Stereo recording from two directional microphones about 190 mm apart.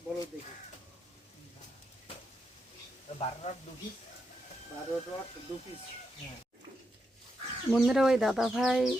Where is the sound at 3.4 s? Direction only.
40° left (ahead or behind).